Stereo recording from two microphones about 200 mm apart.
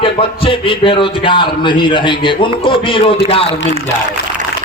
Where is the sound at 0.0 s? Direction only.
25° left (ahead or behind).